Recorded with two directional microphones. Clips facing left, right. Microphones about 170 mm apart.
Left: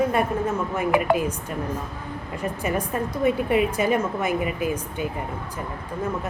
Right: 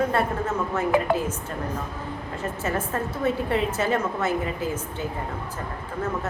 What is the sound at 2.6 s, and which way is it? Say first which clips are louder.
A woman's voice: left 1 dB; 15° left (ahead or behind).